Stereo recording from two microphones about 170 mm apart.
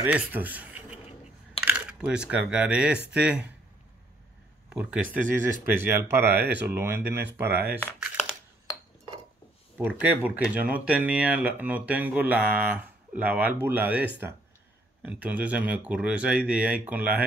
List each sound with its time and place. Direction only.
0.0 s a man's voice: 10° right (ahead or behind)
4.6 s speech: 5° right (ahead or behind)
7.1 s speech: 70° right (ahead or behind)
8.0 s crumpling: 5° right (ahead or behind)
9.8 s speech: 10° right (ahead or behind)